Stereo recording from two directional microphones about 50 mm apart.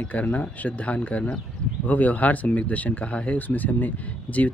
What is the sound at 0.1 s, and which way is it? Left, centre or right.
Speech, left.